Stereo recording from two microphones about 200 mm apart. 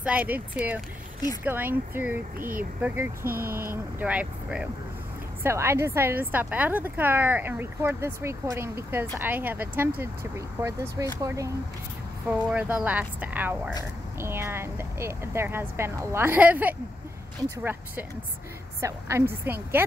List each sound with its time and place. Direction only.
0.0 s a woman's voice: 5° right (ahead or behind)
18.8 s a woman's voice: 15° right (ahead or behind)